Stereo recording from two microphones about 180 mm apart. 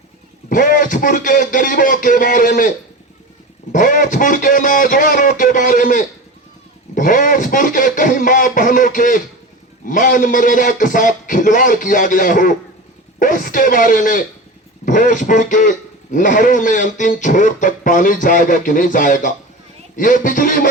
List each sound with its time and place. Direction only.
0.4 s speech: 50° left (ahead or behind)